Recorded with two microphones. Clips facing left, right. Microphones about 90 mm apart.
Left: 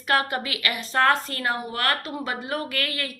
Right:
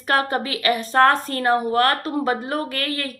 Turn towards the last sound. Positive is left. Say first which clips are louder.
# right 3 dB
turn(degrees=-35)  # may be behind; listen again after turning